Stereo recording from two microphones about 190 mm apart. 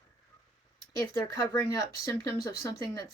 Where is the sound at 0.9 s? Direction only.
20° left (ahead or behind).